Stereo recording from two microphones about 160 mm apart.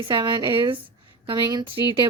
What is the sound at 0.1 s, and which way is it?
Speech, 30° right (ahead or behind).